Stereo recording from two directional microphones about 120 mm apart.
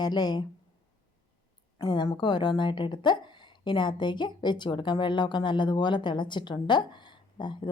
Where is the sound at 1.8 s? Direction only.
35° left (ahead or behind).